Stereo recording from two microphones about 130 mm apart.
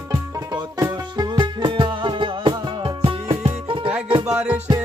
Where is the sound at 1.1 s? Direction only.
35° right (ahead or behind).